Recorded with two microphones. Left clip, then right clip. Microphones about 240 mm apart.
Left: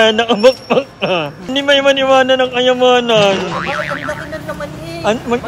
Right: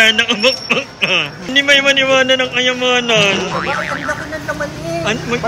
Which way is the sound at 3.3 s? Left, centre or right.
Centre.